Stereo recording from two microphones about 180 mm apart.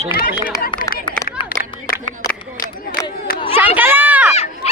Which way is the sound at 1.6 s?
55° left (ahead or behind).